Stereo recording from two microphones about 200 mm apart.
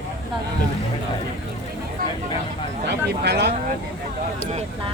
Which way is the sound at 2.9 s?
55° right (ahead or behind).